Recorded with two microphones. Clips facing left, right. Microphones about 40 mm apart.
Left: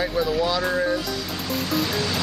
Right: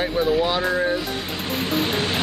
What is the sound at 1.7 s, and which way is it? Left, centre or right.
Vehicle, right.